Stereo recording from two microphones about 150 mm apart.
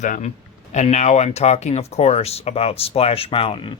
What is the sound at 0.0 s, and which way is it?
A man's voice, 55° left (ahead or behind).